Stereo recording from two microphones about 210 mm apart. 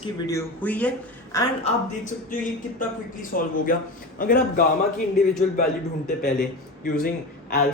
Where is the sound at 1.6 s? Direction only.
35° left (ahead or behind).